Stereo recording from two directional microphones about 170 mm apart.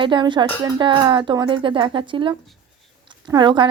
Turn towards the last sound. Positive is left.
turn(degrees=-25)  # may be behind; listen again after turning